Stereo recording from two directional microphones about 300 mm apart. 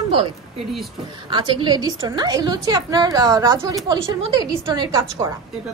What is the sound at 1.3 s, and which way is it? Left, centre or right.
A woman's voice, centre.